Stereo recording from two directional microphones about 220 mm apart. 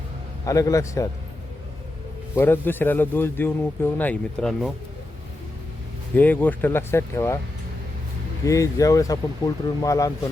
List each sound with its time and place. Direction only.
0.4 s speech: 15° left (ahead or behind)
2.3 s speech: 10° left (ahead or behind)
6.1 s speech: 10° left (ahead or behind)
8.4 s speech: 15° left (ahead or behind)